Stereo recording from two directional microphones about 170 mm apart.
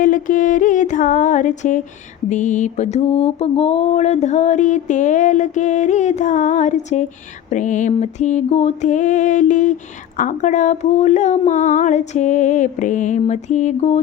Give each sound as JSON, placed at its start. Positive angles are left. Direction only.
{"t": 0.0, "sound": "mantra", "side_deg": 50}